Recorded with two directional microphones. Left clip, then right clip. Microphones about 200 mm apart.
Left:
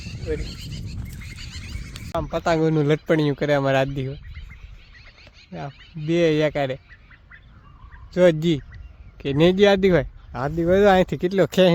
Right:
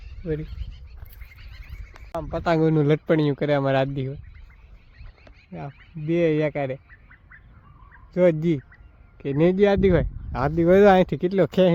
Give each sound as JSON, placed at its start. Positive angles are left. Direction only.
{"t": 0.4, "sound": "neigh", "side_deg": 65}
{"t": 1.4, "sound": "horse", "side_deg": 65}
{"t": 2.4, "sound": "speech", "side_deg": -10}
{"t": 5.5, "sound": "speech", "side_deg": 10}
{"t": 8.1, "sound": "speech", "side_deg": 0}
{"t": 10.3, "sound": "speech", "side_deg": -20}
{"t": 10.8, "sound": "speech", "side_deg": -10}